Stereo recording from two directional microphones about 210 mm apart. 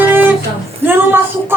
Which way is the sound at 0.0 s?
10° right (ahead or behind).